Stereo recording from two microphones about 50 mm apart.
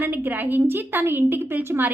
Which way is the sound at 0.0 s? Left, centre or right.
Right.